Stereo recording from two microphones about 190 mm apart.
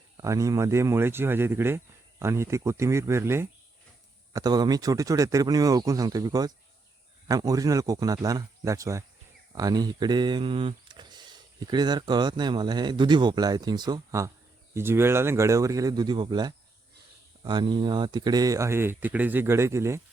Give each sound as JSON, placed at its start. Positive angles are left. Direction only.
{"t": 0.2, "sound": "speech", "side_deg": -15}